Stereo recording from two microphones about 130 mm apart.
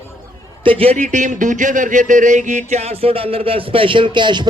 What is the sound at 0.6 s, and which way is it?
Speech, 45° right (ahead or behind).